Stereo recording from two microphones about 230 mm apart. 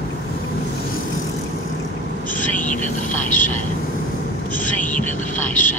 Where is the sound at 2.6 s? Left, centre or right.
Left.